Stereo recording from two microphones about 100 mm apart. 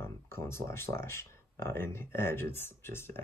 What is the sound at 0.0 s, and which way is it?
Speech, 25° left (ahead or behind).